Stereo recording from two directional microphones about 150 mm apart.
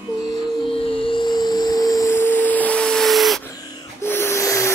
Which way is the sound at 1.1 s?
30° left (ahead or behind).